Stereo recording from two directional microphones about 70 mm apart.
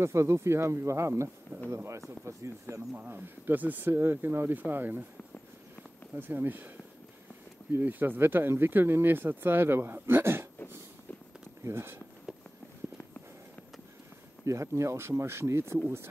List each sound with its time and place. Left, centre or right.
0.0 s speech: right
3.0 s speech: right
6.1 s speech: right
7.7 s speech: right
11.6 s speech: right
14.4 s speech: right